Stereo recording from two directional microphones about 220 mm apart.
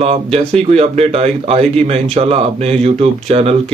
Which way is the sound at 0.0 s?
30° right (ahead or behind).